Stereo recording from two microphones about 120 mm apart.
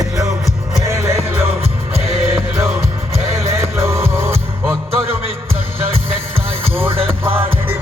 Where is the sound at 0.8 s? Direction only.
20° right (ahead or behind).